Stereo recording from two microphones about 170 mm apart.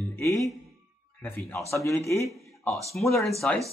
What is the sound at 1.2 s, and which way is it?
Speech, 10° left (ahead or behind).